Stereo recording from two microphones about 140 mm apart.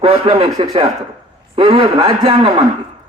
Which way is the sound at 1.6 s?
40° right (ahead or behind).